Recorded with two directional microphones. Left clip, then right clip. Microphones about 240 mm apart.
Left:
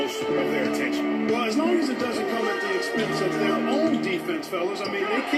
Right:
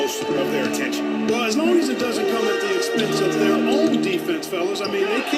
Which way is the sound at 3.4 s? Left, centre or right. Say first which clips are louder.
Right 5 dB; right.